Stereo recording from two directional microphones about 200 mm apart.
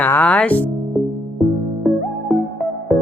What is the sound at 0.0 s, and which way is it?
Speech, 5° left (ahead or behind).